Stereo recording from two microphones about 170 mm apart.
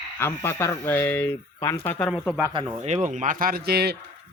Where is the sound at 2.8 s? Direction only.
45° right (ahead or behind); by 4.0 s 70° right (ahead or behind).